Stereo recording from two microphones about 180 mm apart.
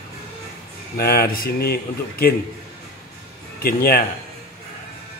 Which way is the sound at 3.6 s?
55° left (ahead or behind).